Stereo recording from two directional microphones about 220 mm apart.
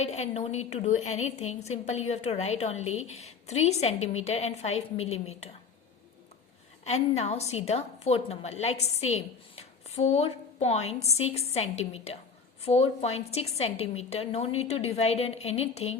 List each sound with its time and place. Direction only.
0.0 s a woman's voice: 30° left (ahead or behind)
7.2 s a woman's voice: 30° left (ahead or behind)